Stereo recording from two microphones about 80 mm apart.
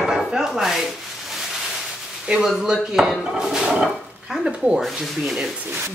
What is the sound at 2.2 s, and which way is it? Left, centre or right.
Speech, centre.